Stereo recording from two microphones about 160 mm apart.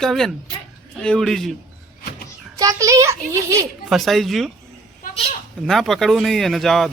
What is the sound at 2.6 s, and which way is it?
A child's voice, 20° right (ahead or behind).